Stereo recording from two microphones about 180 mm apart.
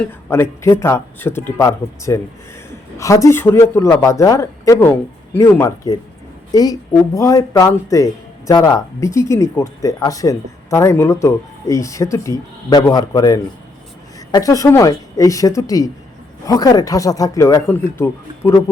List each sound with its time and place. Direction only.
0.0 s a man's voice: 15° left (ahead or behind)